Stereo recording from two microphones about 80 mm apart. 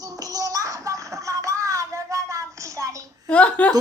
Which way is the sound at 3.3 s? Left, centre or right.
Centre.